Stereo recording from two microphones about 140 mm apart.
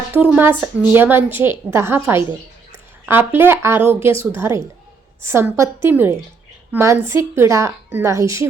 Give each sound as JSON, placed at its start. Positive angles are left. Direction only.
{"t": 0.1, "sound": "a woman's voice", "side_deg": -15}